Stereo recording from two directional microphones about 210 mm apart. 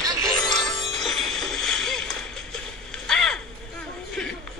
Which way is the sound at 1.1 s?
Centre (ahead or behind).